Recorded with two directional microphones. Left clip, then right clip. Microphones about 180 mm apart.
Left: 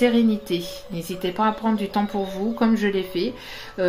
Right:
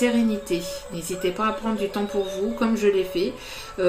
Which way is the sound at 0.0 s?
50° left (ahead or behind).